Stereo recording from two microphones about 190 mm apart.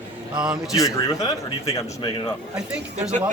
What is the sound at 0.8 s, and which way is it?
Speech, 20° left (ahead or behind).